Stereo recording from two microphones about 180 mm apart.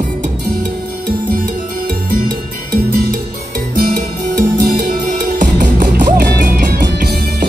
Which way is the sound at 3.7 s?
50° right (ahead or behind).